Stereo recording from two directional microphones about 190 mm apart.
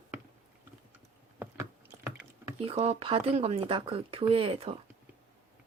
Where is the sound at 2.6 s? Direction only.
35° right (ahead or behind).